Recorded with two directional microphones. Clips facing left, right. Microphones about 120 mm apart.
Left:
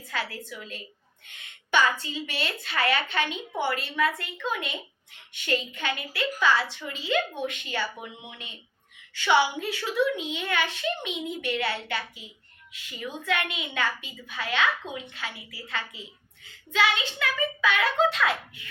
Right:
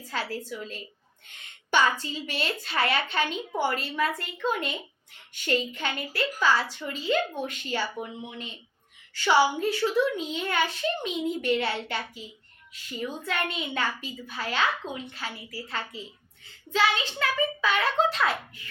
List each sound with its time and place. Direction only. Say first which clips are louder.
0.0 s a woman's voice: right 1 dB; 35° right (ahead or behind)
9.1 s a woman's voice: right 1 dB; 35° right (ahead or behind)
12.7 s a woman's voice: right 3 dB; 40° right (ahead or behind)